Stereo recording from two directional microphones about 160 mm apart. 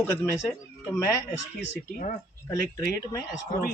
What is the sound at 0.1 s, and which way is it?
A man's voice, 15° left (ahead or behind).